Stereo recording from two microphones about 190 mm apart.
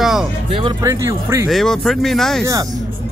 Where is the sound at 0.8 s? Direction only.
15° right (ahead or behind).